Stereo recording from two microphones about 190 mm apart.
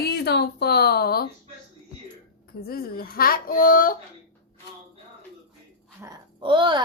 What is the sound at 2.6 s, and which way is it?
Speech, 50° left (ahead or behind).